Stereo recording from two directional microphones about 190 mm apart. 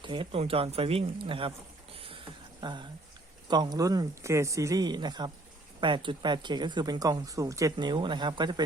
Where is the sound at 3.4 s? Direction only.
20° right (ahead or behind).